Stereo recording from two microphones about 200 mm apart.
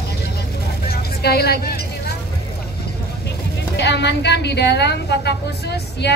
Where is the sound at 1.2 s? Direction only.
50° left (ahead or behind).